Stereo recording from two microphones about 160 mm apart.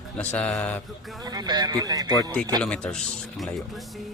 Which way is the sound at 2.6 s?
5° left (ahead or behind).